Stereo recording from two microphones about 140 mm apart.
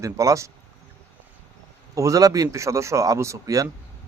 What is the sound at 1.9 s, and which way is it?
A man's voice, 25° right (ahead or behind).